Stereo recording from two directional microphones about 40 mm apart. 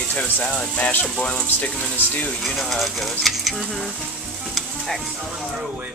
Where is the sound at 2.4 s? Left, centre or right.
Centre.